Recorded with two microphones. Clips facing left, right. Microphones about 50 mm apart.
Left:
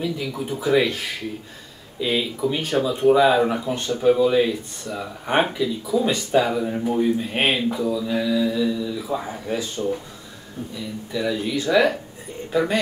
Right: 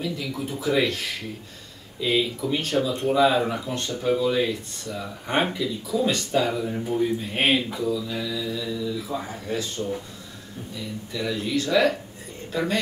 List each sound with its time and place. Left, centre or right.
0.0 s speech: centre
2.0 s speech: centre
6.5 s speech: left
11.1 s speech: centre